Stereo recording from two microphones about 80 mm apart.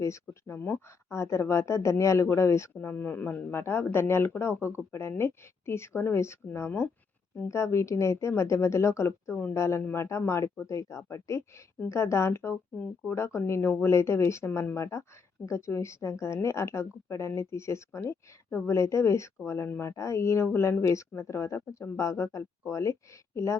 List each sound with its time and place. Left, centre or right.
0.0 s a woman's voice: left
9.3 s speech: left
9.6 s a woman's voice: left